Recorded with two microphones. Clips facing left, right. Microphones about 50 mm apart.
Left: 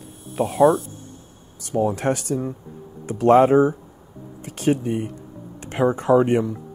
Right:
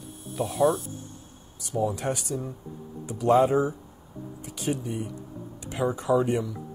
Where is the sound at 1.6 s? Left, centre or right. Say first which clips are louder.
Left 6 dB; left.